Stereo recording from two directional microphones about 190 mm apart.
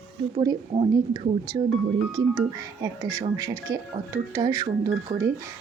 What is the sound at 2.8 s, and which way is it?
Speech, 15° right (ahead or behind).